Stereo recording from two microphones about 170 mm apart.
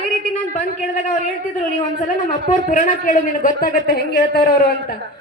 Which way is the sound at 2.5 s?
50° left (ahead or behind).